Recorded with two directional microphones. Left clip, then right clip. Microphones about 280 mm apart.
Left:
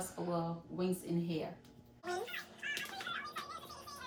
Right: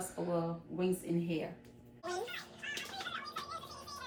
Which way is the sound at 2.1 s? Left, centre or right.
Centre.